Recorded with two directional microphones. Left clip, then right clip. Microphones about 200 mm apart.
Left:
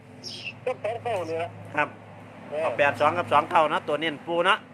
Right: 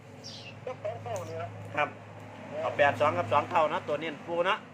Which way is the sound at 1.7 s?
30° left (ahead or behind).